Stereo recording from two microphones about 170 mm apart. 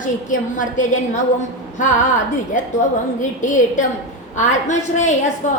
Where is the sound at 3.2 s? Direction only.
45° left (ahead or behind).